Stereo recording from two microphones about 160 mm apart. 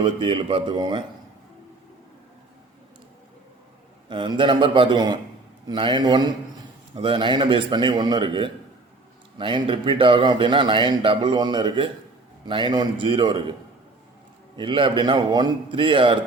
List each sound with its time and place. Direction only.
0.0 s a man's voice: 30° right (ahead or behind)
4.1 s a man's voice: 30° right (ahead or behind)
14.5 s a man's voice: 30° right (ahead or behind)